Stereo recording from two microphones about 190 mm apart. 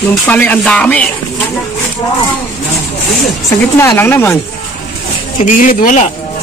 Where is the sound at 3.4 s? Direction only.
15° left (ahead or behind).